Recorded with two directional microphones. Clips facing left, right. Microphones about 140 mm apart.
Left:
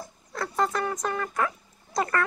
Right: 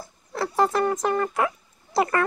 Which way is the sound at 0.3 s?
30° right (ahead or behind).